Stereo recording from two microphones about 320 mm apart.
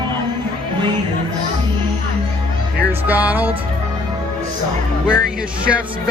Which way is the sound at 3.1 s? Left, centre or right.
Centre.